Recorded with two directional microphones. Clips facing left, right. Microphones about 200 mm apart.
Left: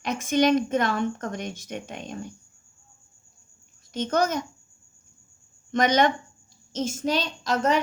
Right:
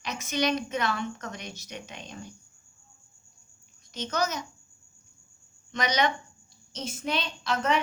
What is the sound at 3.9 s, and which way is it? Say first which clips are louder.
Speech: left 6 dB; 50° left (ahead or behind).